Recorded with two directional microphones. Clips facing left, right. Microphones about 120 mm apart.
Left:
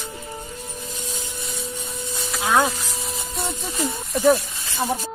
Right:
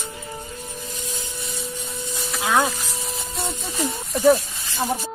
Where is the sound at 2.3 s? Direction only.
20° left (ahead or behind).